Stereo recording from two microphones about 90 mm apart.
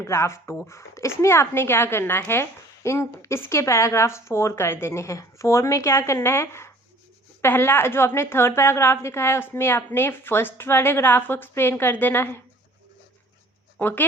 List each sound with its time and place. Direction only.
0.0 s a woman's voice: 30° left (ahead or behind)
13.7 s speech: 20° left (ahead or behind)